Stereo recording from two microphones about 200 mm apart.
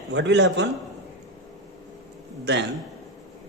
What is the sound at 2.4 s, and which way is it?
Speech, 55° right (ahead or behind).